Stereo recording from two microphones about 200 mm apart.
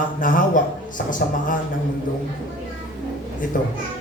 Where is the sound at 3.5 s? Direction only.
45° left (ahead or behind).